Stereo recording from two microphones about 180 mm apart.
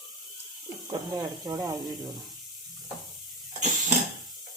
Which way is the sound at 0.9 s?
20° right (ahead or behind).